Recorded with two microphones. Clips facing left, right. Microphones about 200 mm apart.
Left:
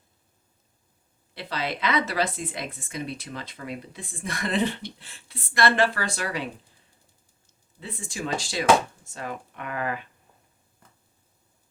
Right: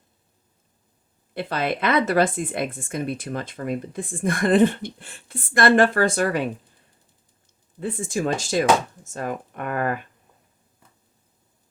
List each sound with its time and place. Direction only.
1.3 s speech: 50° right (ahead or behind)
7.8 s speech: 50° right (ahead or behind)